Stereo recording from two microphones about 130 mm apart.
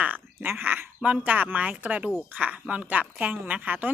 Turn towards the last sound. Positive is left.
turn(degrees=-15)  # may be behind; listen again after turning